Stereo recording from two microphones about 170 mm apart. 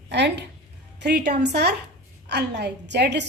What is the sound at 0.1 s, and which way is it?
A woman's voice, 85° right.